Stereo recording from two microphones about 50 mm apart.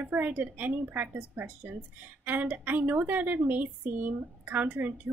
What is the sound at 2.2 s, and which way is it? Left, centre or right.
A woman's voice, right.